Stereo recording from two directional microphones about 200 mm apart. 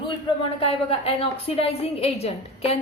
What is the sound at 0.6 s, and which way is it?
A woman's voice, 30° left (ahead or behind).